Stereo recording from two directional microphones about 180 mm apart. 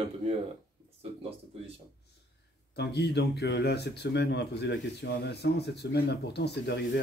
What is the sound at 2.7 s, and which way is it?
Speech, 65° left (ahead or behind).